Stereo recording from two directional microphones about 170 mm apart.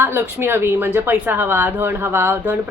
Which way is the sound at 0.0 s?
15° right (ahead or behind).